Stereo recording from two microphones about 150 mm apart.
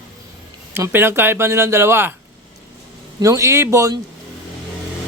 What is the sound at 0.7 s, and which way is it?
Speech, 15° right (ahead or behind).